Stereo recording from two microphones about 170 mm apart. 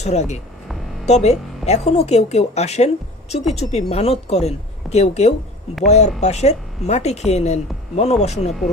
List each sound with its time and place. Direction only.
0.0 s speech: 40° left (ahead or behind)